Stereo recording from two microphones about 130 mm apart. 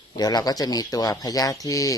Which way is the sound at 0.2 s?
30° left (ahead or behind).